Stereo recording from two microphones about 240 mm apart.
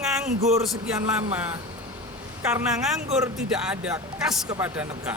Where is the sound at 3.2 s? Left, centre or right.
Centre.